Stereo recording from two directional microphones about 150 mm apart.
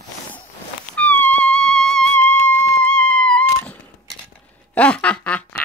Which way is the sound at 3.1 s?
5° left (ahead or behind).